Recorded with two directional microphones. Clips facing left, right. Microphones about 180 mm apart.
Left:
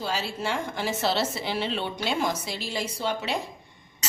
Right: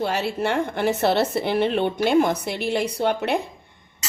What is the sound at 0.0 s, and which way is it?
Speech, 60° right (ahead or behind).